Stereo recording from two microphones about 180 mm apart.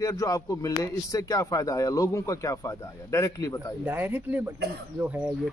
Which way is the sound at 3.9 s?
10° right (ahead or behind).